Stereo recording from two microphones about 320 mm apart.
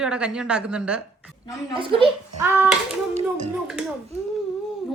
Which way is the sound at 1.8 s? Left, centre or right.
Centre.